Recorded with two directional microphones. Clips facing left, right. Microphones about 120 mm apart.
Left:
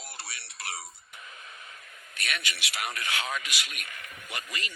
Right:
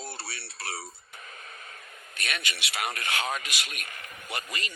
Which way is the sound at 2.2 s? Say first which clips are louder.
Right 1 dB; 30° right (ahead or behind).